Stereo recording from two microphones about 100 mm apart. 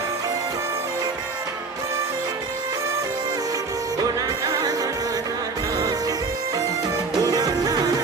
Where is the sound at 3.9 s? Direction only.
40° right (ahead or behind).